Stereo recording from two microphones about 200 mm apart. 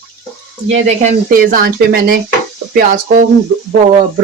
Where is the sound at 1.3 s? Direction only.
45° right (ahead or behind).